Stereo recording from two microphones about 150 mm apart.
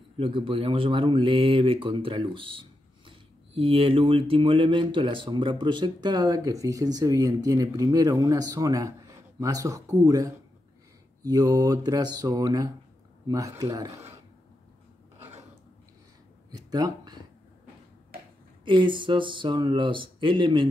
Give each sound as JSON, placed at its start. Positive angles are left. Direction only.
{"t": 0.2, "sound": "speech", "side_deg": -40}
{"t": 16.5, "sound": "a sound", "side_deg": -25}
{"t": 18.7, "sound": "speech", "side_deg": -35}